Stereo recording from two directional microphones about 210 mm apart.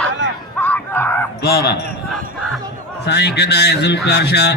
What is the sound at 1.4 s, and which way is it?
Speech, 50° left (ahead or behind).